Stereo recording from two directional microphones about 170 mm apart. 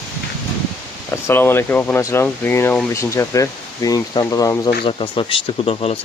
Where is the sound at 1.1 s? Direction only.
10° left (ahead or behind).